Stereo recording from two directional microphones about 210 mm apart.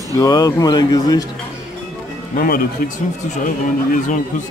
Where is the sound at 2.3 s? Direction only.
45° left (ahead or behind).